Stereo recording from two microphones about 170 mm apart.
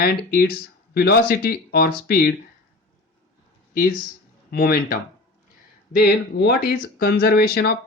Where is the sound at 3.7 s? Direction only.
60° left (ahead or behind).